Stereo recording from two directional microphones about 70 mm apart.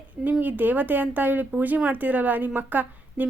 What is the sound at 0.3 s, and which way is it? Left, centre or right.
A woman's voice, right.